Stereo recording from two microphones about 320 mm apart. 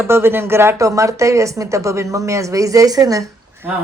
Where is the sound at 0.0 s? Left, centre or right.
Centre.